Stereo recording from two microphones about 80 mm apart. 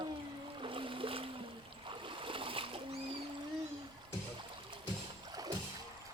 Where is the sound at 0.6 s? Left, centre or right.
Right.